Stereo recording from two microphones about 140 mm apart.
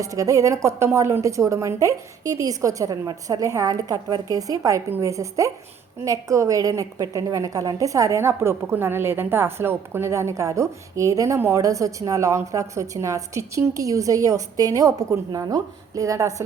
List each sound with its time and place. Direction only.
0.0 s a woman's voice: 25° right (ahead or behind)